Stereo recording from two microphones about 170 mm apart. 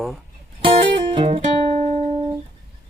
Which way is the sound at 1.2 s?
30° right (ahead or behind).